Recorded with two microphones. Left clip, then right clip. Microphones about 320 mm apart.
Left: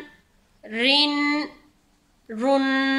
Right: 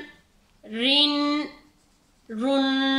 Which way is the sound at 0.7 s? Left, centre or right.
Left.